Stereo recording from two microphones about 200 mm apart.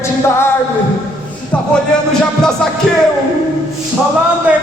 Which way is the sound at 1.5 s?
5° left (ahead or behind).